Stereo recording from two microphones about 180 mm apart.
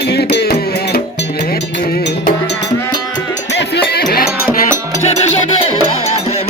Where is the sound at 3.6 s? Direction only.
65° left (ahead or behind).